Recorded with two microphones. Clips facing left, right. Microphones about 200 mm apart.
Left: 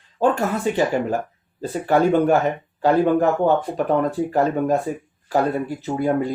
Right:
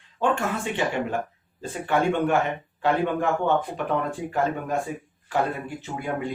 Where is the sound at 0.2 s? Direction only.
40° left (ahead or behind).